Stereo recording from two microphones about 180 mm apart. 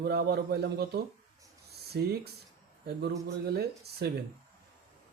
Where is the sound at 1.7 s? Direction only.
60° right (ahead or behind).